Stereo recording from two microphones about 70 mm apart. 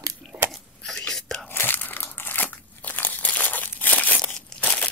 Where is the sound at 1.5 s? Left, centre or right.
Left.